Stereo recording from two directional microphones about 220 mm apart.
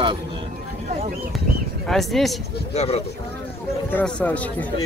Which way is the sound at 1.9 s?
Centre (ahead or behind).